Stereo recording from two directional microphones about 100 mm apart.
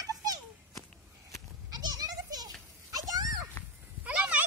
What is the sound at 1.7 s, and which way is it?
Children playing, 40° right (ahead or behind).